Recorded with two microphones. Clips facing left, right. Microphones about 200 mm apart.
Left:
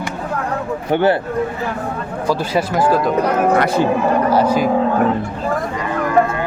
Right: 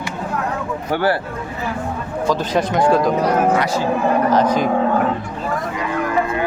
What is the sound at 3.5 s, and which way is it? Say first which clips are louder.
Speech: left 3 dB; 60° left (ahead or behind).